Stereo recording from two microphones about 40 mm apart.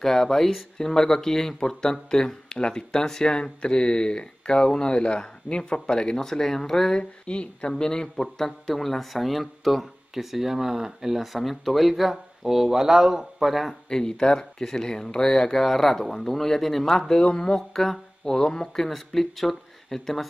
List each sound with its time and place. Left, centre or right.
0.0 s speech: centre
7.2 s speech: left
7.7 s a man's voice: centre
13.8 s speech: centre
17.1 s speech: centre
18.9 s a man's voice: centre